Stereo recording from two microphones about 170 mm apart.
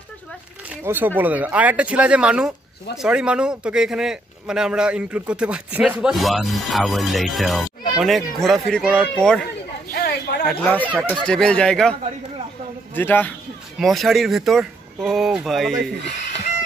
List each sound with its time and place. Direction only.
0.7 s speech: 10° right (ahead or behind); by 9.5 s 5° left (ahead or behind)
9.9 s snake: 70° left (ahead or behind)
10.4 s speech: 10° left (ahead or behind)
12.9 s speech: 10° left (ahead or behind)